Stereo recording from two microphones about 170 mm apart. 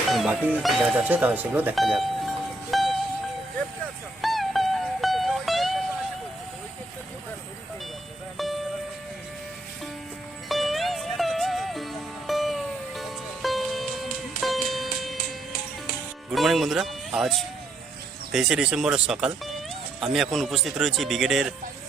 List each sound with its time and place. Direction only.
0.1 s speech: 5° right (ahead or behind)
1.7 s music: centre (ahead or behind)
4.2 s music: centre (ahead or behind)
8.4 s music: centre (ahead or behind)
10.5 s music: centre (ahead or behind)
16.3 s music: centre (ahead or behind)
18.3 s speech: centre (ahead or behind)